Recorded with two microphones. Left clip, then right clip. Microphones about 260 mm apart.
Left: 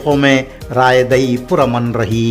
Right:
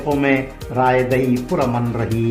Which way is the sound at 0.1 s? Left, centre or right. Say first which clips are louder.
Left 6 dB; left.